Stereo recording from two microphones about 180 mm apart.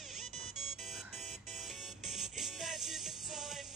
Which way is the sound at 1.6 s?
Centre (ahead or behind).